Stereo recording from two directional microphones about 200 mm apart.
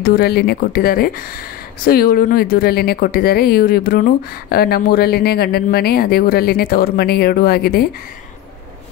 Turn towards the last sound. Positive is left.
turn(degrees=50)  # may be behind; listen again after turning